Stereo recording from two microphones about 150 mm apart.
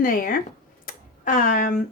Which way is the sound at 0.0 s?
70° left (ahead or behind).